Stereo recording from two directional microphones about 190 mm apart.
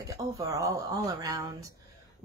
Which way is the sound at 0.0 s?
20° right (ahead or behind).